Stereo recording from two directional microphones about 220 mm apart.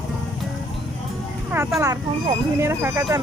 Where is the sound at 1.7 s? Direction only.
Centre (ahead or behind).